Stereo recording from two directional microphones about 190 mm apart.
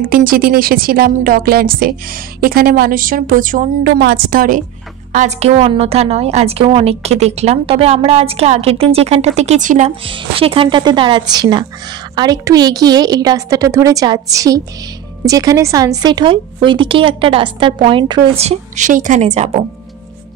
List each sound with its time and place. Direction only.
0.0 s a woman's voice: 50° right (ahead or behind)
5.1 s a woman's voice: 35° right (ahead or behind)
18.4 s a woman's voice: 35° right (ahead or behind)